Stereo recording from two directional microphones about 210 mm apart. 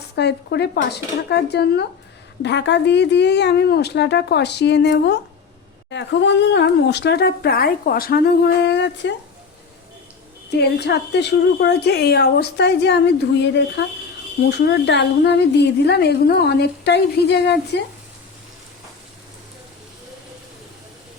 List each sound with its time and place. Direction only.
0.2 s a woman's voice: 50° left (ahead or behind)
8.7 s speech: 55° left (ahead or behind)
10.5 s a woman's voice: 50° left (ahead or behind)